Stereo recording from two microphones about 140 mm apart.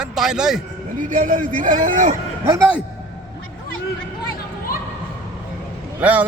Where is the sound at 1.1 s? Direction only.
65° right (ahead or behind).